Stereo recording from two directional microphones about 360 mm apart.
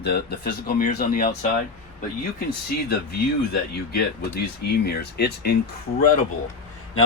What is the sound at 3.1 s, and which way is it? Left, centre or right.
Speech, left.